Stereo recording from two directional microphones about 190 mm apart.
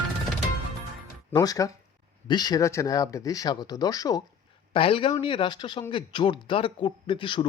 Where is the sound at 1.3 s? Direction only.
20° left (ahead or behind).